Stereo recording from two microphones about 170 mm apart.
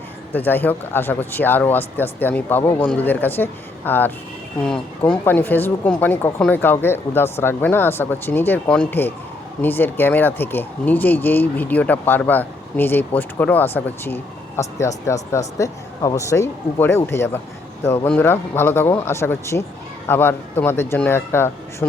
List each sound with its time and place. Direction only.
0.3 s speech: 10° left (ahead or behind)